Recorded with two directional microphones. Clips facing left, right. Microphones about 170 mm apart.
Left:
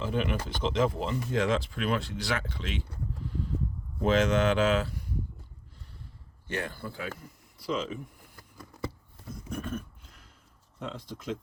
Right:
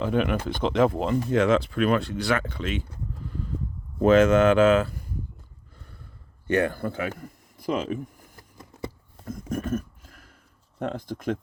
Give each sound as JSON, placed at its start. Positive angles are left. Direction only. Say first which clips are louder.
{"t": 0.0, "sound": "speech", "louder": "right 6 dB", "side_deg": -60}
{"t": 4.0, "sound": "speech", "louder": "right 7 dB", "side_deg": -55}
{"t": 6.5, "sound": "speech", "louder": "right 11 dB", "side_deg": -60}
{"t": 7.2, "sound": "speech", "louder": "right 7 dB", "side_deg": -50}
{"t": 9.2, "sound": "a sound", "louder": "right 7 dB", "side_deg": -50}
{"t": 10.8, "sound": "speech", "louder": "right 8 dB", "side_deg": -55}